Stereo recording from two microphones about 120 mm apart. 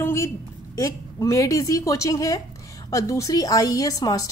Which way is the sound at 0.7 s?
25° left (ahead or behind).